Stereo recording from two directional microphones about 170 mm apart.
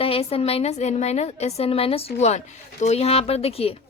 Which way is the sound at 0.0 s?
35° left (ahead or behind).